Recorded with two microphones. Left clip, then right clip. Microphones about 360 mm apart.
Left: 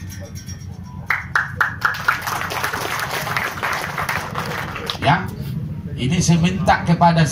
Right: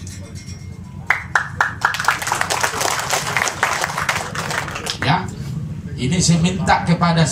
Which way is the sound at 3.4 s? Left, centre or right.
Centre.